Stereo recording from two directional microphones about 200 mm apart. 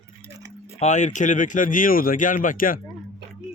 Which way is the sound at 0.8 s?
35° left (ahead or behind).